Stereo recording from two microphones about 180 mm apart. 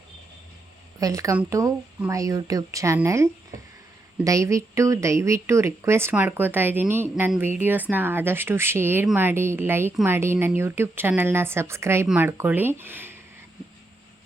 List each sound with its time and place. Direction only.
0.9 s speech: 20° right (ahead or behind)